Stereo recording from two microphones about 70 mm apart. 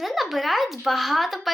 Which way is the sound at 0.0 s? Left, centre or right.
Centre.